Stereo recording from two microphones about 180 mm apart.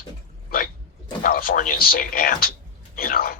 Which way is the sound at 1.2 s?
55° left (ahead or behind).